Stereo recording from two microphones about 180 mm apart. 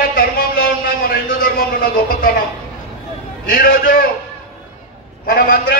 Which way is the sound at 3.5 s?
50° left (ahead or behind).